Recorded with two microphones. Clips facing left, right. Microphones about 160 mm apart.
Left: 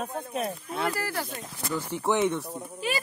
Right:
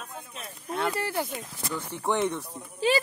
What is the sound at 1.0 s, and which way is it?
Speech, 20° right (ahead or behind).